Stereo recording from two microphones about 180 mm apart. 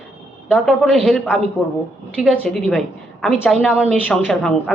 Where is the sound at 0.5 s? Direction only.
5° left (ahead or behind).